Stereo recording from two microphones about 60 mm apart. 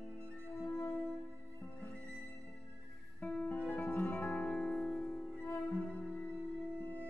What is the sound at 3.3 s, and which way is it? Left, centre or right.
Music, centre.